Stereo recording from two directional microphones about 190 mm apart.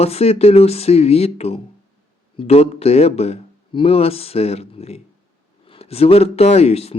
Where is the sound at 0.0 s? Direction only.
35° left (ahead or behind).